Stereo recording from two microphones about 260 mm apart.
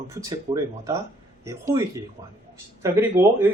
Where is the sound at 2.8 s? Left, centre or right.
Centre.